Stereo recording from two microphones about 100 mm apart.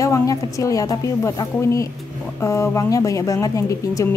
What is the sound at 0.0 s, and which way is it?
Speech, 35° left (ahead or behind).